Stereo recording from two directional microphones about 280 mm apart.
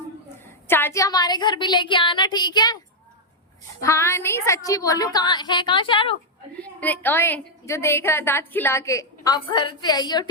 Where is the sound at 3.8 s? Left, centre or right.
Centre.